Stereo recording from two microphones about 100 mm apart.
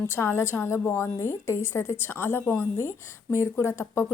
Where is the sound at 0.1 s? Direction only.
25° left (ahead or behind).